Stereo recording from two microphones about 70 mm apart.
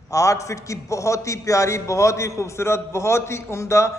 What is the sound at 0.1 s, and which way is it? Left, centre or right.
A man's voice, left.